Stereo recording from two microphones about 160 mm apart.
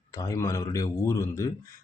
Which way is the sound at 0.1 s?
20° left (ahead or behind).